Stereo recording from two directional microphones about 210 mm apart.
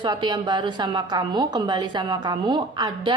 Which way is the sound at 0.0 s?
20° right (ahead or behind).